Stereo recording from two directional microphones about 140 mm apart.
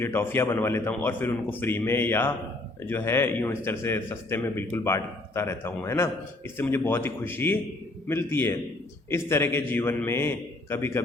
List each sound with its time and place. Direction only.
0.0 s a man's voice: 15° left (ahead or behind)